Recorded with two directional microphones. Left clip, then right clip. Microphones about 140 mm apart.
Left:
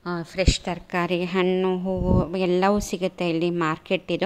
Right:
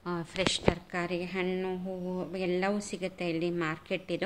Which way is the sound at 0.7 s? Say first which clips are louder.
Left 5 dB; 55° left (ahead or behind).